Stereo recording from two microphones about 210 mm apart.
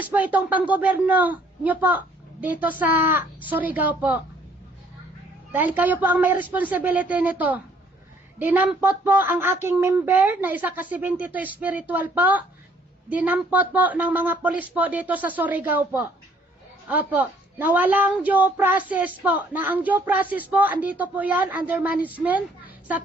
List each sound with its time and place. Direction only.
0.0 s a woman's voice: 10° right (ahead or behind)
5.5 s a woman's voice: 10° right (ahead or behind)